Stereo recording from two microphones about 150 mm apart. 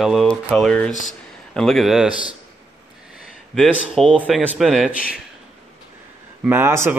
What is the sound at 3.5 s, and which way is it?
Speech, 5° left (ahead or behind).